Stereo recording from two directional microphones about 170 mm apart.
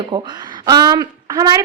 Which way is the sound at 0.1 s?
30° right (ahead or behind).